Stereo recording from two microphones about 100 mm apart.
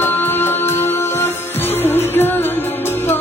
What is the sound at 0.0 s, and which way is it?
Music, 20° left (ahead or behind).